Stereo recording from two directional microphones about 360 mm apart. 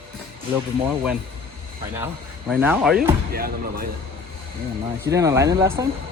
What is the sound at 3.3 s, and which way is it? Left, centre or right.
Speech, right.